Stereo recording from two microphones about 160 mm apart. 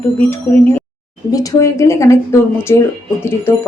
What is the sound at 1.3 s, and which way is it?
Speech, 20° left (ahead or behind).